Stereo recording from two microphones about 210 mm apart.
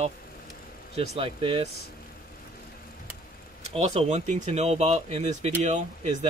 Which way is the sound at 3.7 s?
30° right (ahead or behind).